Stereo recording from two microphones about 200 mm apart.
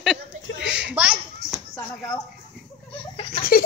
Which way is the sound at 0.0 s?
Centre (ahead or behind).